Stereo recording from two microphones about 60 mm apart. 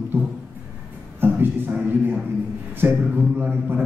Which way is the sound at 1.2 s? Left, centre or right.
Right.